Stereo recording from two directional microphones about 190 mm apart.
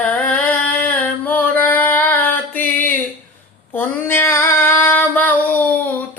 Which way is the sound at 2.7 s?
45° left (ahead or behind).